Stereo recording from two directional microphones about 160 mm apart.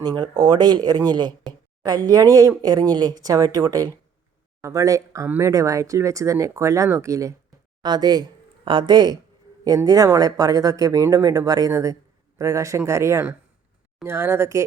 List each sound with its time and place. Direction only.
0.0 s speech: 25° right (ahead or behind)